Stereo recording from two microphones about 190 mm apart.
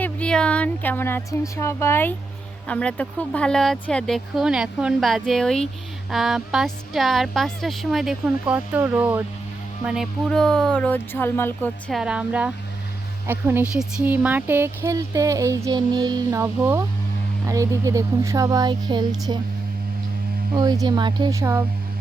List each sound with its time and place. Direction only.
0.0 s a woman's voice: 5° left (ahead or behind)
11.9 s a woman's voice: centre (ahead or behind); by 19.4 s 25° right (ahead or behind)
20.5 s speech: 20° right (ahead or behind)